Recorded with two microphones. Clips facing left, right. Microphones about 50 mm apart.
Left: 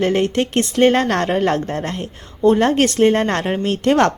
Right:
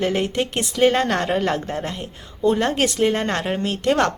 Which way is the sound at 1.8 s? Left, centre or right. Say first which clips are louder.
Left 4 dB; left.